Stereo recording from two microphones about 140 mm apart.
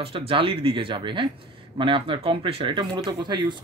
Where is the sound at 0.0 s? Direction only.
40° right (ahead or behind).